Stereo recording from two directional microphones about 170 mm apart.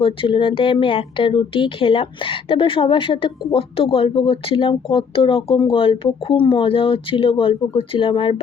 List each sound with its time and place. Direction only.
0.0 s speech: 30° left (ahead or behind)